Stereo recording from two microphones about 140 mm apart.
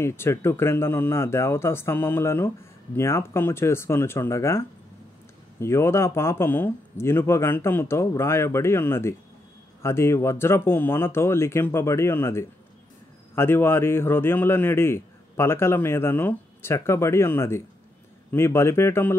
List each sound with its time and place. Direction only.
0.0 s a man's voice: 20° left (ahead or behind)